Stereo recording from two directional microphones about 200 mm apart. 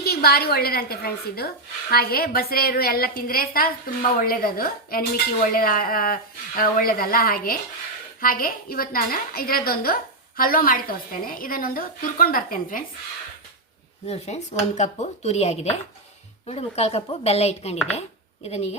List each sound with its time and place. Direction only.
0.0 s a woman's voice: 50° left (ahead or behind)
14.1 s speech: 35° left (ahead or behind)